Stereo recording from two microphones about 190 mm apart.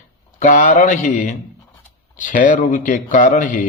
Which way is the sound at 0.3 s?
45° left (ahead or behind).